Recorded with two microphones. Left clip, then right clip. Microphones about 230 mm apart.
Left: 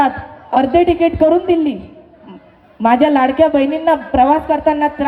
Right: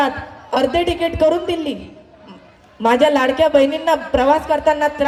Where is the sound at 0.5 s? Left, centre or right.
Right.